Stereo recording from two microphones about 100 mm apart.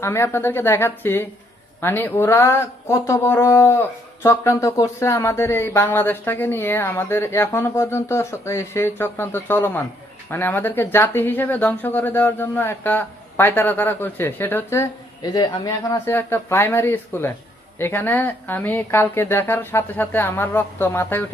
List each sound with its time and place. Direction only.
0.0 s speech: 25° left (ahead or behind)
15.2 s speech: 40° left (ahead or behind)
16.1 s speech: 25° left (ahead or behind)